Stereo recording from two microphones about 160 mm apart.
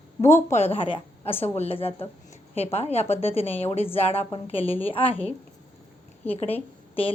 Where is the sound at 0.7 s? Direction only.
35° left (ahead or behind).